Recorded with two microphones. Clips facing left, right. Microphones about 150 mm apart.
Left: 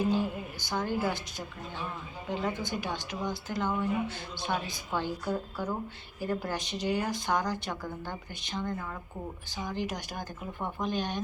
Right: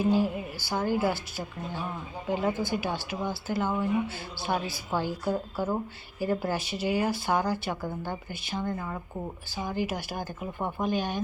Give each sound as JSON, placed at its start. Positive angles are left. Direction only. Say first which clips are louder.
{"t": 0.6, "sound": "speech", "louder": "right 4 dB", "side_deg": -5}